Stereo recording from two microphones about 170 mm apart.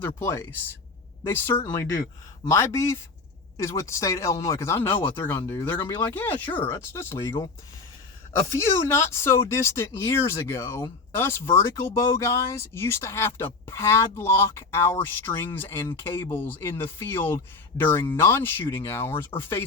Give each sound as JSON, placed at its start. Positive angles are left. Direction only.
{"t": 0.2, "sound": "speech", "side_deg": 15}
{"t": 8.5, "sound": "speech", "side_deg": 15}